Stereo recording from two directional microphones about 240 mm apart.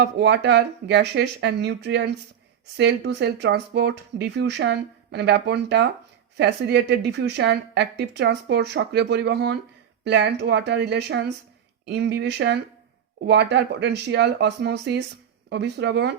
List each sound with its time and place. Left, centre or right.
0.0 s a woman's voice: right